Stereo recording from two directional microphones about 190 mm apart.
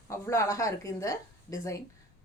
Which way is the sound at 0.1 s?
15° left (ahead or behind).